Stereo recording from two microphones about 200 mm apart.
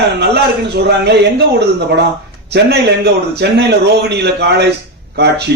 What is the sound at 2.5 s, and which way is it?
A man's voice, 55° right (ahead or behind).